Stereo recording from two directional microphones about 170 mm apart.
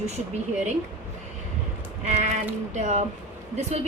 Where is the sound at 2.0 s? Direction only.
40° right (ahead or behind).